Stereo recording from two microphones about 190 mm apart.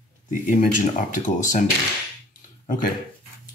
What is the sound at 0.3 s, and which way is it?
Speech, 45° left (ahead or behind).